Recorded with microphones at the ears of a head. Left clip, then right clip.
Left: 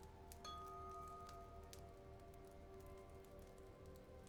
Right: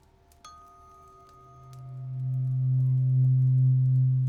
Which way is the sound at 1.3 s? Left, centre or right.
Right.